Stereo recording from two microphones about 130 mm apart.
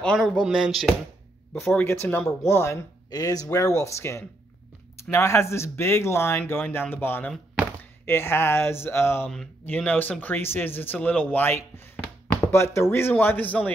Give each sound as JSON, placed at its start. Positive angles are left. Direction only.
{"t": 0.0, "sound": "speech", "side_deg": 5}
{"t": 1.6, "sound": "speech", "side_deg": 20}
{"t": 9.3, "sound": "speech", "side_deg": 5}